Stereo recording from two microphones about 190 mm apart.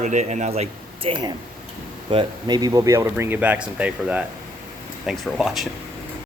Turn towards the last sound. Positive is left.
turn(degrees=0)  # may be behind; listen again after turning